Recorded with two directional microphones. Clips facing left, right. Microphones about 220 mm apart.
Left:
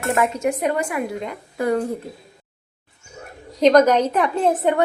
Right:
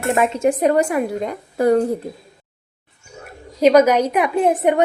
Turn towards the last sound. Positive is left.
turn(degrees=-15)  # may be behind; listen again after turning